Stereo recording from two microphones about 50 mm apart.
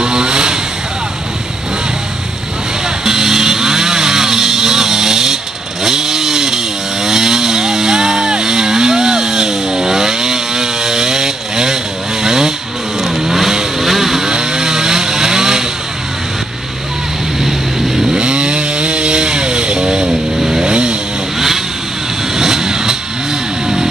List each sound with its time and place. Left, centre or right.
0.0 s vehicle: centre
3.1 s music: centre
5.9 s chainsaw: centre
13.0 s vehicle: centre
17.4 s chainsaw: centre
22.3 s vehicle: centre